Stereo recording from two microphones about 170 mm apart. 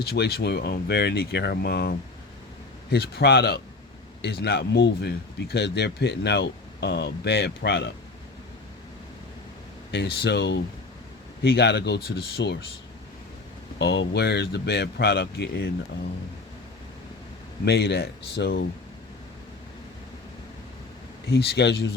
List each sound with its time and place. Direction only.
0.0 s speech: 65° left (ahead or behind)
2.9 s speech: 75° left (ahead or behind)
9.9 s speech: 80° left
13.7 s speech: 90° left
17.7 s speech: 75° left (ahead or behind)
21.2 s speech: 75° left (ahead or behind)